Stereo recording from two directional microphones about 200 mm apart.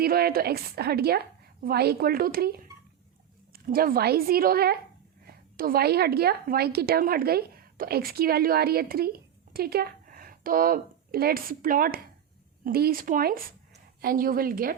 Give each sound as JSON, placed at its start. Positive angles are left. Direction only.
{"t": 0.0, "sound": "a woman's voice", "side_deg": -50}